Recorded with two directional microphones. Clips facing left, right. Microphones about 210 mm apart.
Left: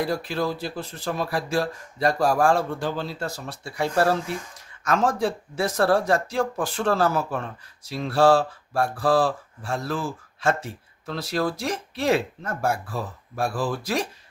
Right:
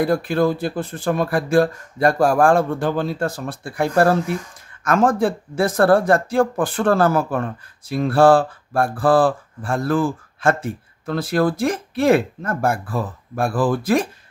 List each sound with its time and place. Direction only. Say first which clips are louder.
0.0 s speech: right 7 dB; 50° right (ahead or behind)